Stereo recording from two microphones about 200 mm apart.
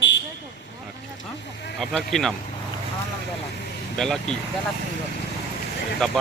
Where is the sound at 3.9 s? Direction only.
Centre (ahead or behind).